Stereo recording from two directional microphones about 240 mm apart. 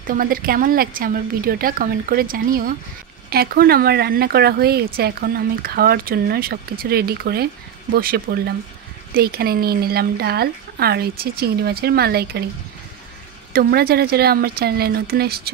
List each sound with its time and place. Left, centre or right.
0.0 s speech: right
13.5 s speech: right